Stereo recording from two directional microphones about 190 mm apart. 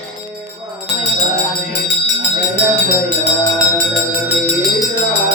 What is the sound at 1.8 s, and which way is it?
Music, 70° left (ahead or behind).